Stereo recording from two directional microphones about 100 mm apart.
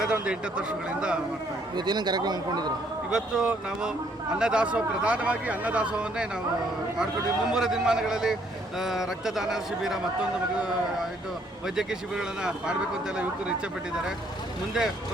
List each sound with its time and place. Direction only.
0.0 s speech: 10° right (ahead or behind)
1.7 s speech: 45° right (ahead or behind)
3.1 s speech: 5° right (ahead or behind)